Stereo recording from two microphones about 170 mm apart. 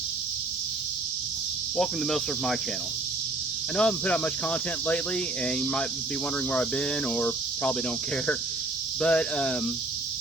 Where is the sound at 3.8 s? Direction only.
5° left (ahead or behind).